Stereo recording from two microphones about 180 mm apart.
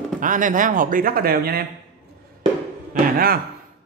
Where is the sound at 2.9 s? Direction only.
55° right (ahead or behind).